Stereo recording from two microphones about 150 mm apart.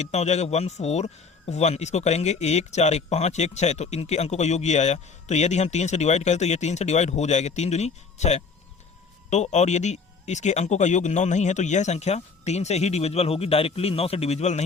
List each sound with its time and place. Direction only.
0.0 s a man's voice: 45° left (ahead or behind)